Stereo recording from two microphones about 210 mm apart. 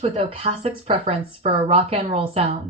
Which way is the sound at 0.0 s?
30° right (ahead or behind).